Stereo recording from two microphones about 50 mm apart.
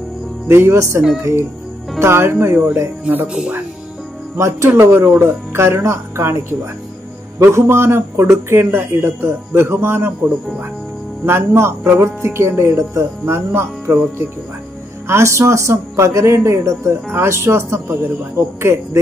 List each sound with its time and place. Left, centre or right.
0.5 s speech: right
0.7 s speech: right
2.0 s speech: right
3.3 s speech: centre
4.4 s speech: right
4.6 s a man's voice: right
11.2 s speech: right
15.0 s speech: right
17.1 s speech: right